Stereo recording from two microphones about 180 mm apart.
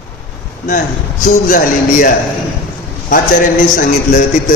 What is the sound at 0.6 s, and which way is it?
A man's voice, 45° left (ahead or behind).